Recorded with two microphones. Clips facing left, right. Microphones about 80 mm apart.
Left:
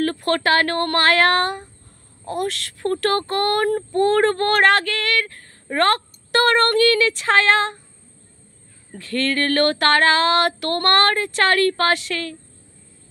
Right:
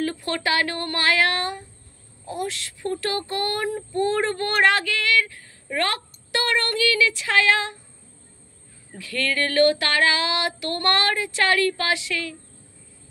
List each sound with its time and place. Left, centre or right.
0.0 s speech: left
8.9 s speech: left